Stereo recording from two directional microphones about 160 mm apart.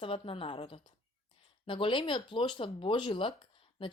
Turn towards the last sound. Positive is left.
turn(degrees=30)  # may be behind; listen again after turning